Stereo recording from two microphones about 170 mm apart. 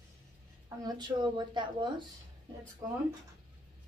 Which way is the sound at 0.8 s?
25° right (ahead or behind).